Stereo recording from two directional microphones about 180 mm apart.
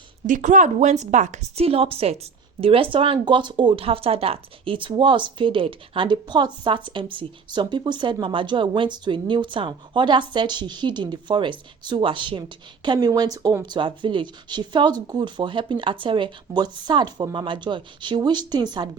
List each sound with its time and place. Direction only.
0.3 s a woman's voice: 45° right (ahead or behind); by 18.9 s 25° right (ahead or behind)